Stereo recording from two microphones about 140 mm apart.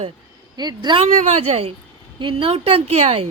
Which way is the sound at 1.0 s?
55° right (ahead or behind).